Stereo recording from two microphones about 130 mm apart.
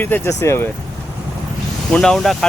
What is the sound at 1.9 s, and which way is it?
Speech, 5° left (ahead or behind).